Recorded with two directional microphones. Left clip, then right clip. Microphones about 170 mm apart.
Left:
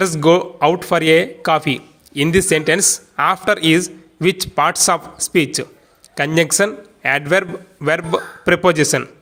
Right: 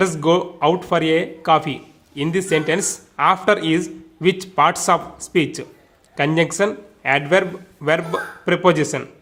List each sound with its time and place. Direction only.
0.0 s speech: 25° left (ahead or behind)